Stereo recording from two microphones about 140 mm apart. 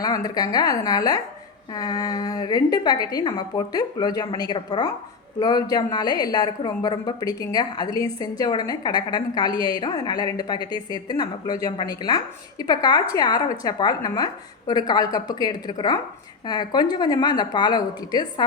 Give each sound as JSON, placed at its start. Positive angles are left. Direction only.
{"t": 0.0, "sound": "a woman's voice", "side_deg": 25}